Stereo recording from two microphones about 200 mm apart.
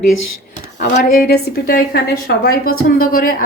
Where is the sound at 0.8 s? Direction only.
40° left (ahead or behind).